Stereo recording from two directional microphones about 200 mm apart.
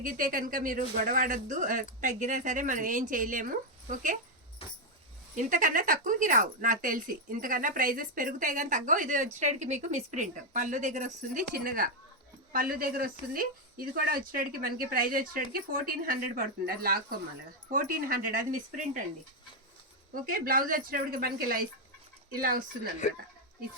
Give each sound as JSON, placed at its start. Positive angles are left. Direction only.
{"t": 0.0, "sound": "a woman's voice", "side_deg": -40}
{"t": 5.4, "sound": "a woman's voice", "side_deg": -40}
{"t": 20.2, "sound": "speech", "side_deg": -45}